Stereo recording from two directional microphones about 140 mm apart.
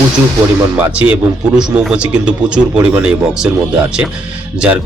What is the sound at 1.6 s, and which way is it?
Speech, 10° right (ahead or behind).